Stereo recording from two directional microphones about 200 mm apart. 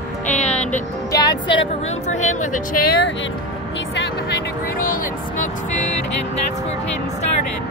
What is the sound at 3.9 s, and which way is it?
Music, 60° left (ahead or behind).